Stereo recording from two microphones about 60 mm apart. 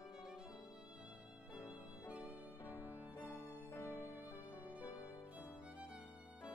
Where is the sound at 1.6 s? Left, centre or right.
Left.